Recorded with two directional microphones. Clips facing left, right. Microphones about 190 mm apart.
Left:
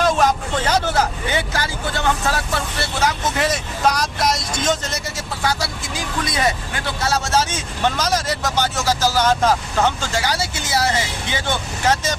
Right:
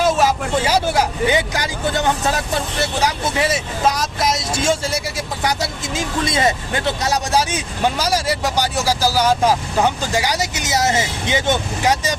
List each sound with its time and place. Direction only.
0.0 s speech: 5° right (ahead or behind)
3.0 s speech: 10° right (ahead or behind)